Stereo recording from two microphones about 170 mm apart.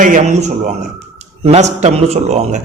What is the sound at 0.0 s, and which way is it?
Speech, 45° right (ahead or behind).